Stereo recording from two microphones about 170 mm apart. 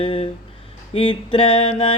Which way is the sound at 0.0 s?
30° left (ahead or behind).